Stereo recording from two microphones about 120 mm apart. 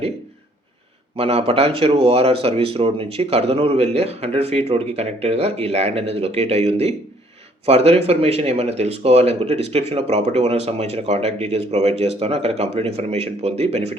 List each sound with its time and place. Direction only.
1.1 s speech: 55° right (ahead or behind)